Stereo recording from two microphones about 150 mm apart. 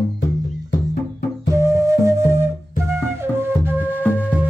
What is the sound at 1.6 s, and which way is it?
Flute, 20° right (ahead or behind).